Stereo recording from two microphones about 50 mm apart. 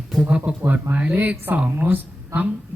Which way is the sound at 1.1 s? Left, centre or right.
Right.